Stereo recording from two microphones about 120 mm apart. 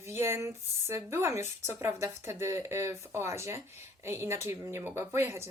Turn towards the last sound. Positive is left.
turn(degrees=-20)  # may be behind; listen again after turning